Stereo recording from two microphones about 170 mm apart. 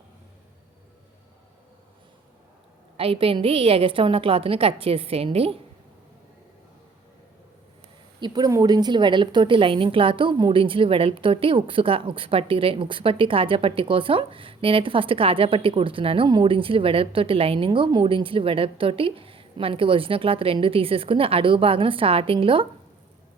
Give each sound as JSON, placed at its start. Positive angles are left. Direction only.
{"t": 3.0, "sound": "a woman's voice", "side_deg": -35}
{"t": 8.2, "sound": "a woman's voice", "side_deg": -20}